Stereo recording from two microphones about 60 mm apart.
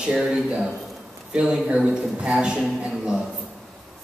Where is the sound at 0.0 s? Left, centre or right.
Centre.